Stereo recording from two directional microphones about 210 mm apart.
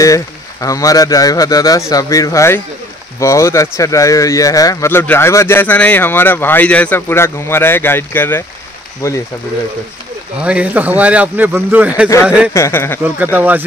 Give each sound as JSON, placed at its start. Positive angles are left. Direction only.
{"t": 0.0, "sound": "speech", "side_deg": 15}
{"t": 10.4, "sound": "speech", "side_deg": -5}
{"t": 12.5, "sound": "speech", "side_deg": 15}
{"t": 13.0, "sound": "speech", "side_deg": -10}